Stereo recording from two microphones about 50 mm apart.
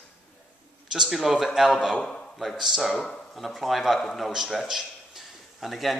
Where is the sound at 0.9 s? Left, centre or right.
Centre.